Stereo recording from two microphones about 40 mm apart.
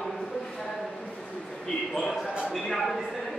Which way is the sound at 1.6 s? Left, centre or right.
Centre.